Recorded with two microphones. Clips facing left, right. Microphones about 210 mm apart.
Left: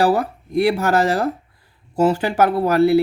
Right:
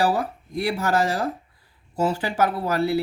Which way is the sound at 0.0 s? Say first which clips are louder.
Left 5 dB; 65° left (ahead or behind).